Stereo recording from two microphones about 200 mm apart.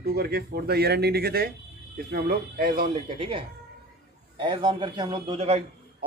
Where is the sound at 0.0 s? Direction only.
50° right (ahead or behind).